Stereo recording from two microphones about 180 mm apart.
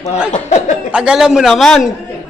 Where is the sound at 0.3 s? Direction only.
40° left (ahead or behind).